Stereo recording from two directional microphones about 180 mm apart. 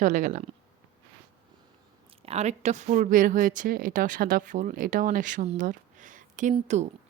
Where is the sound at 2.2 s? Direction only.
35° right (ahead or behind).